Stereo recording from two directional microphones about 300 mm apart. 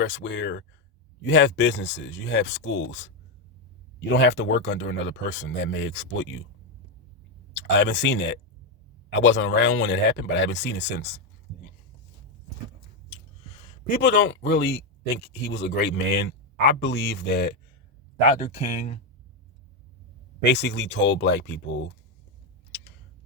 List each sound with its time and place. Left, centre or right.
0.0 s speech: left
4.1 s speech: left
7.5 s speech: left
13.8 s speech: left
20.4 s speech: left